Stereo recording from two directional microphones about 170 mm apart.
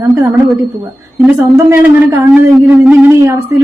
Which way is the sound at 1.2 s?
15° right (ahead or behind).